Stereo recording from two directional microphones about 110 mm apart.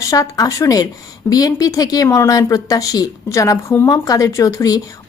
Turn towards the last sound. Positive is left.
turn(degrees=30)  # may be behind; listen again after turning